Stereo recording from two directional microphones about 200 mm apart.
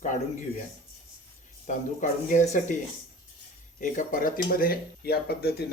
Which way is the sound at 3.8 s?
40° left (ahead or behind).